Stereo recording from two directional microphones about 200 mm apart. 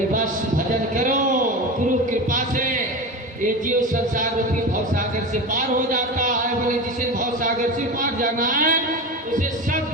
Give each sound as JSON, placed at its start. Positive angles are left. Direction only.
{"t": 0.7, "sound": "a sound", "side_deg": -40}
{"t": 3.4, "sound": "a man's voice", "side_deg": -40}
{"t": 5.5, "sound": "a man's voice", "side_deg": -40}